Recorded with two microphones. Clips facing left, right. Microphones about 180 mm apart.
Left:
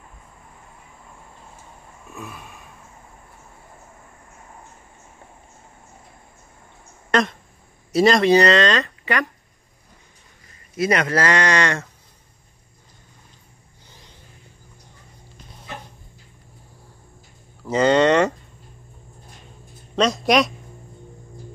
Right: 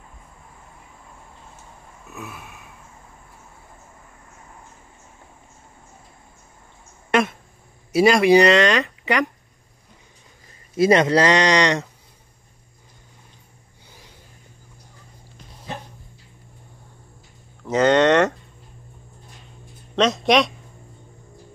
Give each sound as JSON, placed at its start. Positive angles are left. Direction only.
{"t": 2.0, "sound": "a sound", "side_deg": -5}
{"t": 7.1, "sound": "a sound", "side_deg": -5}
{"t": 7.9, "sound": "speech", "side_deg": -10}
{"t": 10.8, "sound": "speech", "side_deg": -25}
{"t": 17.6, "sound": "speech", "side_deg": 0}
{"t": 20.0, "sound": "speech", "side_deg": 0}